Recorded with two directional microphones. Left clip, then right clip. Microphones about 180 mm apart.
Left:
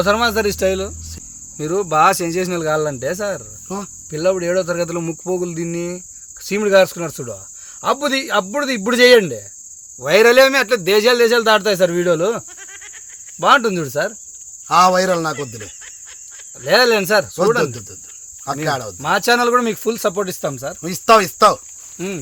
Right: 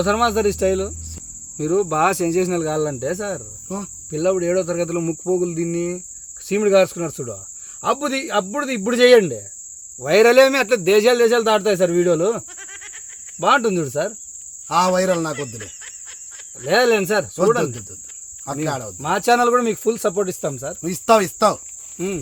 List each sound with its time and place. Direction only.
0.0 s speech: 5° right (ahead or behind)
3.7 s speech: 25° left (ahead or behind)
4.1 s speech: 5° right (ahead or behind)
13.4 s speech: 5° right (ahead or behind)
14.7 s speech: 20° left (ahead or behind)
15.4 s speech: centre (ahead or behind)
18.4 s speech: 25° left (ahead or behind)
19.0 s speech: 10° right (ahead or behind)
20.8 s speech: 25° left (ahead or behind)
21.9 s speech: 10° right (ahead or behind)